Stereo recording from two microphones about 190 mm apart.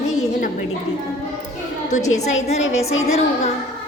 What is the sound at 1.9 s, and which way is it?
A woman's voice, 40° left (ahead or behind).